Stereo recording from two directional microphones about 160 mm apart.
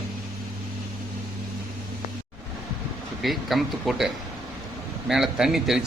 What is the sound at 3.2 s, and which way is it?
A man's voice, centre (ahead or behind).